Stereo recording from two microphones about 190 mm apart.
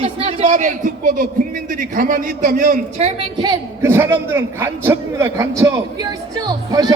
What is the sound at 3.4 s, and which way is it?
A man's voice, 15° right (ahead or behind).